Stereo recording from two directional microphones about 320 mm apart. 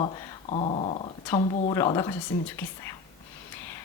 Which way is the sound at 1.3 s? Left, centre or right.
Centre.